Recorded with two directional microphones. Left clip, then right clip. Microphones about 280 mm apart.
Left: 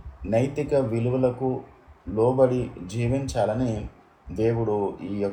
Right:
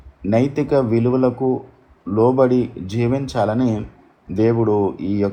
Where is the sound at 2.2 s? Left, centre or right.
Centre.